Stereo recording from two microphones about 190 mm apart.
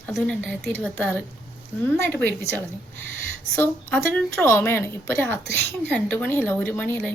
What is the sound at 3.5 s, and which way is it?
A woman's voice, 10° left (ahead or behind).